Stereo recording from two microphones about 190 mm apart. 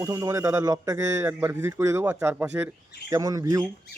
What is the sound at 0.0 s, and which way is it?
Speech, 15° right (ahead or behind).